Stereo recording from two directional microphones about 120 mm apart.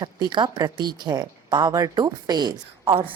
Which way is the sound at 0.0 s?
40° right (ahead or behind).